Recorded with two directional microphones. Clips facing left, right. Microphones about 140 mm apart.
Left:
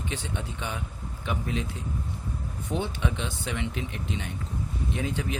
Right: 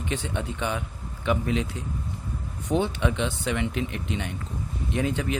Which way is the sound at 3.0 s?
70° right (ahead or behind).